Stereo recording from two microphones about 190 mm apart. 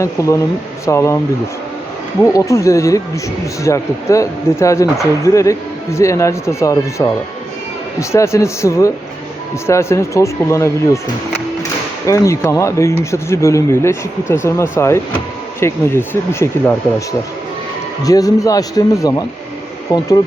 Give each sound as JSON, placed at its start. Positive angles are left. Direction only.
{"t": 0.0, "sound": "speech", "side_deg": 15}
{"t": 2.3, "sound": "speech", "side_deg": 15}
{"t": 12.0, "sound": "speech", "side_deg": 15}